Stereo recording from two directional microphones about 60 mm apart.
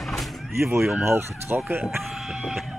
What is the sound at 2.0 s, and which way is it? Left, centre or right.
Chicken, centre.